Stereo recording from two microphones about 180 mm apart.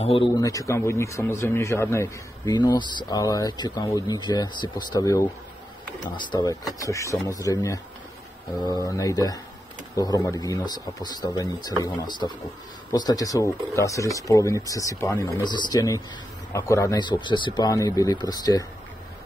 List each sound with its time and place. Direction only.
0.0 s a man's voice: 30° left (ahead or behind)
0.4 s speech: 20° left (ahead or behind)